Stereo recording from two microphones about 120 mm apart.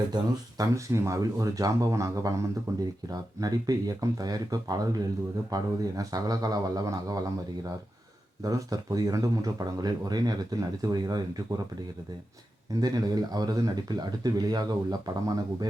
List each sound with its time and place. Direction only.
0.1 s speech: 40° right (ahead or behind)
0.6 s speech: 25° right (ahead or behind)
8.4 s speech: 30° right (ahead or behind)
12.8 s speech: 35° right (ahead or behind)